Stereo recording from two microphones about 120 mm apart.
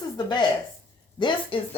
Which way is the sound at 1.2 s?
40° left (ahead or behind).